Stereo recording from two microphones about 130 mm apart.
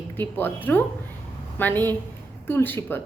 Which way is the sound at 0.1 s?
15° left (ahead or behind).